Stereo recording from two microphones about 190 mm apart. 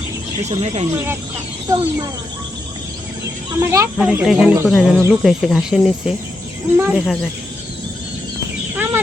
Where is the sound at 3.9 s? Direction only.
5° right (ahead or behind).